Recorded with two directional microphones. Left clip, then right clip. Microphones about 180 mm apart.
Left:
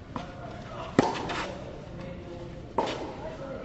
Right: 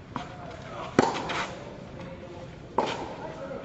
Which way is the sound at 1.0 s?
10° right (ahead or behind).